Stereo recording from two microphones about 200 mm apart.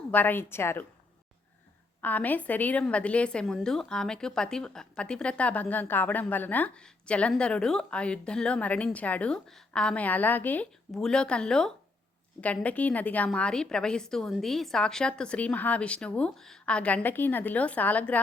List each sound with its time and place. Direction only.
0.1 s a woman's voice: 10° left (ahead or behind)
2.0 s a woman's voice: 10° left (ahead or behind)